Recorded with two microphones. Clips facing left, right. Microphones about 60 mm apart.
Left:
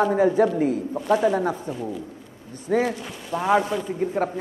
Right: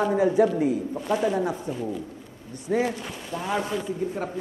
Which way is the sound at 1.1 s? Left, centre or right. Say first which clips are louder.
Left 4 dB; left.